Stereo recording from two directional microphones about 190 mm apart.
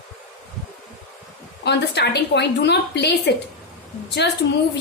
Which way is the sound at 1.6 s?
60° left (ahead or behind).